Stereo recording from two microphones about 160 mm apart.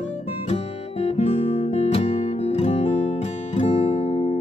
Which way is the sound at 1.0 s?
40° left (ahead or behind).